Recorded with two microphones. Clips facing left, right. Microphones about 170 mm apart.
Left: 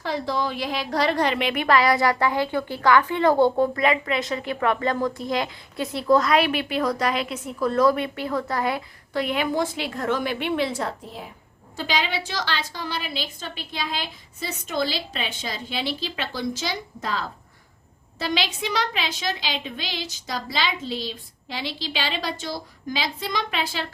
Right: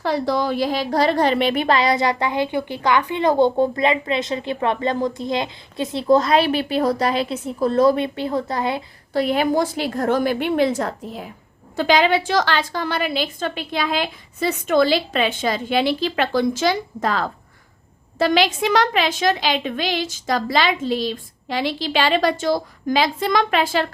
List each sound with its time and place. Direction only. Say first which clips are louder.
0.0 s a woman's voice: right 5 dB; 50° right (ahead or behind)
11.8 s a woman's voice: right 10 dB; 55° right (ahead or behind)